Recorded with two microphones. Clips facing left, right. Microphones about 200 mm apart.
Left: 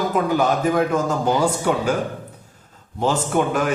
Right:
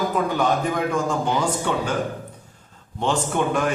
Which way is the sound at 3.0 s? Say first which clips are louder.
Left 3 dB; 5° left (ahead or behind).